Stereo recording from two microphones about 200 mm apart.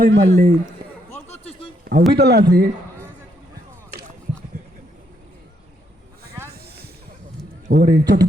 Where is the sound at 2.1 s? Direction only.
50° right (ahead or behind).